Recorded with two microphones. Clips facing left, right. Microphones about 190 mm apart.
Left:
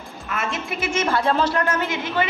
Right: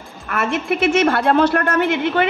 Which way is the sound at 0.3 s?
60° right (ahead or behind).